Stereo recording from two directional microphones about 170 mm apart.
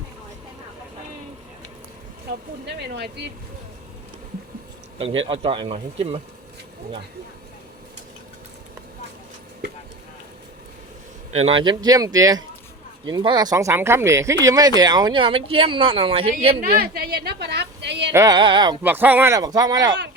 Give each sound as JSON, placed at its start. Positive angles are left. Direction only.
{"t": 2.9, "sound": "speech", "side_deg": -80}
{"t": 4.9, "sound": "speech", "side_deg": -35}
{"t": 11.3, "sound": "speech", "side_deg": -35}
{"t": 16.6, "sound": "a woman's voice", "side_deg": -55}
{"t": 18.1, "sound": "speech", "side_deg": -15}
{"t": 18.3, "sound": "speech", "side_deg": -25}
{"t": 18.8, "sound": "speech", "side_deg": -10}